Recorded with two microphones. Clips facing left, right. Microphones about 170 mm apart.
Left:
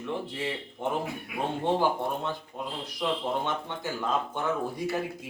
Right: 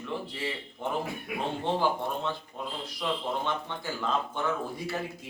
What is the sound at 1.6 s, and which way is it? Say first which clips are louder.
A man's voice: left 2 dB; 15° left (ahead or behind).